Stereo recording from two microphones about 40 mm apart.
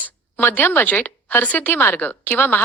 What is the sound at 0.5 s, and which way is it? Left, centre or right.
A woman's voice, left.